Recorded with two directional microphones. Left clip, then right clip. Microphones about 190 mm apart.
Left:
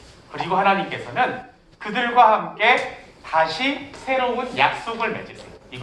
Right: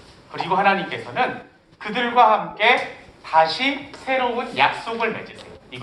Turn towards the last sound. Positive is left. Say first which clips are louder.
# right 1 dB
turn(degrees=-15)  # may be behind; listen again after turning